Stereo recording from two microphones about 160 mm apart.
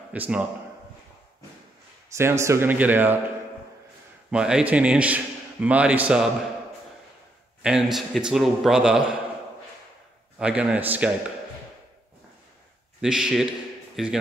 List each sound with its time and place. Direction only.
0.1 s a man's voice: 10° right (ahead or behind)
2.1 s a man's voice: 15° right (ahead or behind)
4.3 s a man's voice: 5° right (ahead or behind)
7.6 s a man's voice: centre (ahead or behind)
10.4 s a man's voice: 5° right (ahead or behind)
13.0 s a man's voice: 5° right (ahead or behind)